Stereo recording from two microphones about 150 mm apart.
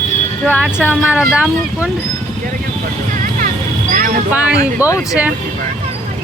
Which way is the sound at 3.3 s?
60° right (ahead or behind).